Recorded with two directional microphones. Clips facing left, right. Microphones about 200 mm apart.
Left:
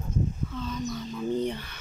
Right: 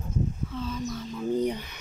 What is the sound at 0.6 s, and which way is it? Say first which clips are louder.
Bird: even; 5° right (ahead or behind).